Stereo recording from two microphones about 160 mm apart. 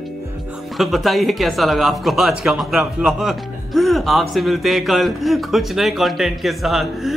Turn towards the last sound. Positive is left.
turn(degrees=0)  # may be behind; listen again after turning